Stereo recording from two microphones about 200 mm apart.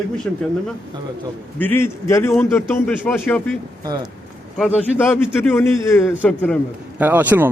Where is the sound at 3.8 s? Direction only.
20° right (ahead or behind).